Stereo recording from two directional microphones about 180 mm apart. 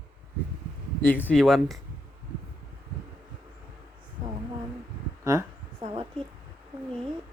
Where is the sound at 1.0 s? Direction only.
10° left (ahead or behind).